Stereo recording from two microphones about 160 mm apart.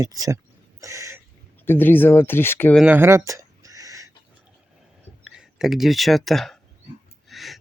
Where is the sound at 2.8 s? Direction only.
10° right (ahead or behind).